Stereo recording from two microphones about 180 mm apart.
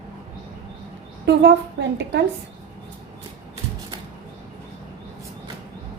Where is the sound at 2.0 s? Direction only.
80° right.